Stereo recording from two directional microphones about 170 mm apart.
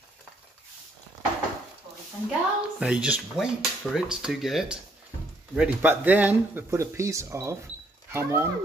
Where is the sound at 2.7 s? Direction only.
5° right (ahead or behind).